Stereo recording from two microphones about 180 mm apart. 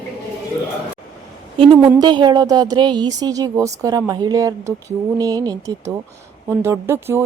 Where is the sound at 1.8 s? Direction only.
20° right (ahead or behind).